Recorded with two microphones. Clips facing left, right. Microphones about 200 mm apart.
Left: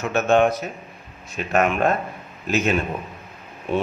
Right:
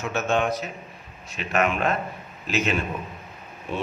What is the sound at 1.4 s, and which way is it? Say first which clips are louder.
Speech: left 4 dB; 45° left (ahead or behind).